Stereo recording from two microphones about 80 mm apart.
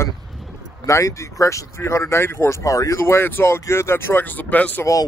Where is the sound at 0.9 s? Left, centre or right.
Left; by 4.8 s centre.